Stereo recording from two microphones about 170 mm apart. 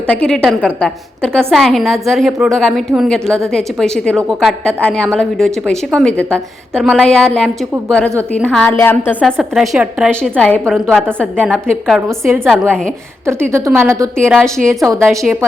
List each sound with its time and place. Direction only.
0.1 s a woman's voice: 5° left (ahead or behind)
9.4 s a woman's voice: 5° right (ahead or behind)
13.5 s a woman's voice: 15° right (ahead or behind)
14.8 s a woman's voice: centre (ahead or behind)